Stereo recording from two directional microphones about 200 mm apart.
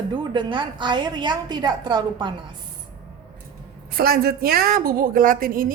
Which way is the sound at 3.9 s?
50° right (ahead or behind).